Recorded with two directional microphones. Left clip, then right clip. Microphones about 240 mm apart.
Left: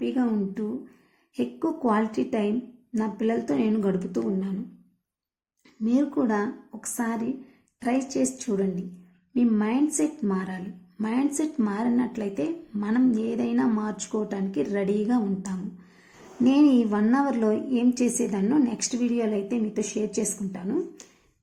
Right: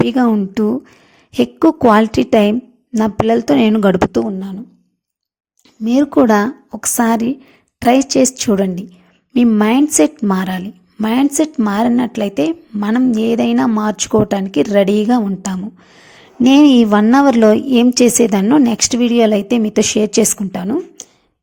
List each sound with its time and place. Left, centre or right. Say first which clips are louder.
0.1 s a woman's voice: right 12 dB; right
5.8 s a woman's voice: right 13 dB; right